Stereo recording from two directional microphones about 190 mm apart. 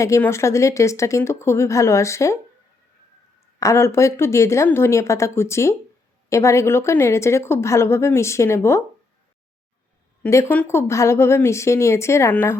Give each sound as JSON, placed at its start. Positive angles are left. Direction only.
{"t": 0.0, "sound": "a woman's voice", "side_deg": 15}
{"t": 3.6, "sound": "a woman's voice", "side_deg": 15}
{"t": 10.2, "sound": "a woman's voice", "side_deg": 15}